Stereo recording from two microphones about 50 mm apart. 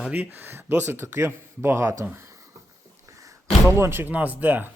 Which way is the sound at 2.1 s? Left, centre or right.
Right.